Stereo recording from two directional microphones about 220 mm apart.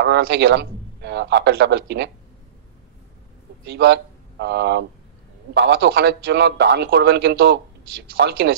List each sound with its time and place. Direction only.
0.0 s speech: 50° right (ahead or behind)
3.6 s a man's voice: 50° right (ahead or behind)